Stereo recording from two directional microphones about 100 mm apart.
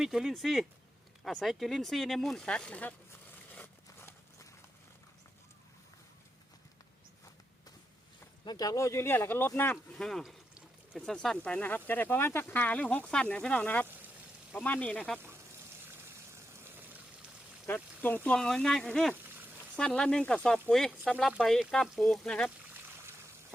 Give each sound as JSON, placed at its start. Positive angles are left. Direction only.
{"t": 0.0, "sound": "speech", "side_deg": -5}
{"t": 3.5, "sound": "a sound", "side_deg": 15}
{"t": 8.4, "sound": "speech", "side_deg": 40}
{"t": 10.0, "sound": "speech", "side_deg": 5}
{"t": 15.9, "sound": "vehicle", "side_deg": -25}
{"t": 17.7, "sound": "speech", "side_deg": 20}
{"t": 18.3, "sound": "speech", "side_deg": 5}
{"t": 22.7, "sound": "a sound", "side_deg": -25}